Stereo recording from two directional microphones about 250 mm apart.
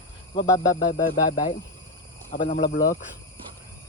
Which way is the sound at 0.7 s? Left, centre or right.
Left.